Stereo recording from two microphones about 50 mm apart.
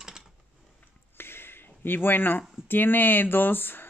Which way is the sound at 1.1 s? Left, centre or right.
Left.